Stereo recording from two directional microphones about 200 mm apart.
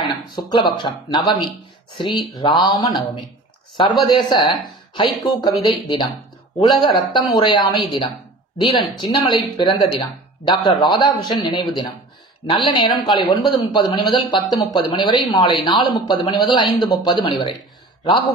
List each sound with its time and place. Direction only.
0.0 s speech: 25° left (ahead or behind)